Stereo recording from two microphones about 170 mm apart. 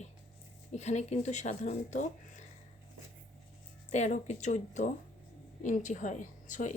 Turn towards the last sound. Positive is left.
turn(degrees=50)  # may be behind; listen again after turning